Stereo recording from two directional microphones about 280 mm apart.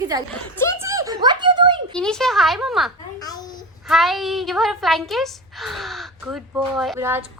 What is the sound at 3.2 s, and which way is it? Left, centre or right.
Speech, centre.